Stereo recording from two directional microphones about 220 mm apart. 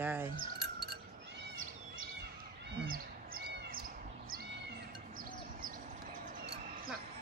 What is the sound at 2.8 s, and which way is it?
Basketball bounce, 40° right (ahead or behind).